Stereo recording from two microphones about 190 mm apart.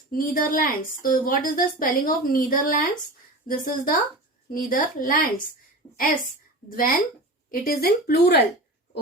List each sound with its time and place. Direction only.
0.1 s a woman's voice: 50° left (ahead or behind)
6.7 s a woman's voice: 50° left (ahead or behind)